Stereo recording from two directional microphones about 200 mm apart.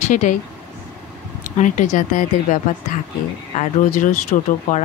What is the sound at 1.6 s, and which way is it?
Speech, 40° left (ahead or behind).